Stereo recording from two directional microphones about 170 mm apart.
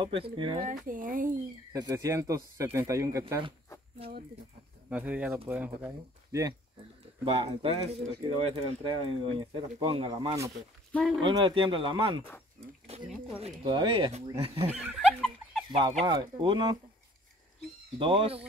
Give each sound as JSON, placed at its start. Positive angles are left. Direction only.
{"t": 0.0, "sound": "speech", "side_deg": -30}
{"t": 0.7, "sound": "speech", "side_deg": -50}
{"t": 1.7, "sound": "speech", "side_deg": -20}
{"t": 4.8, "sound": "speech", "side_deg": -10}
{"t": 5.9, "sound": "speech", "side_deg": -20}
{"t": 7.2, "sound": "speech", "side_deg": -35}
{"t": 10.9, "sound": "speech", "side_deg": 5}
{"t": 11.2, "sound": "speech", "side_deg": -30}
{"t": 14.7, "sound": "speech", "side_deg": -5}
{"t": 15.1, "sound": "a sound", "side_deg": 0}
{"t": 15.7, "sound": "speech", "side_deg": -35}
{"t": 17.9, "sound": "speech", "side_deg": -30}